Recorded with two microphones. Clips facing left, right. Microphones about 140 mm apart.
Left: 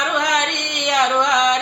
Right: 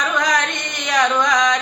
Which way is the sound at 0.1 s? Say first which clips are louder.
Even; 25° left (ahead or behind).